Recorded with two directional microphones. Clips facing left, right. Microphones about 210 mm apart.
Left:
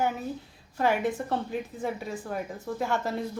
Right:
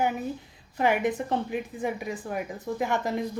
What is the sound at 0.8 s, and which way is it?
A woman's voice, 15° right (ahead or behind).